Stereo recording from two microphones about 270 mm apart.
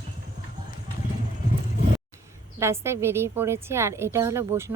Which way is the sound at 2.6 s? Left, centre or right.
Centre.